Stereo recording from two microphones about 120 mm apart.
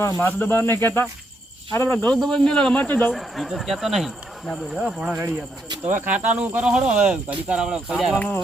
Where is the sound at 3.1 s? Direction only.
Centre (ahead or behind).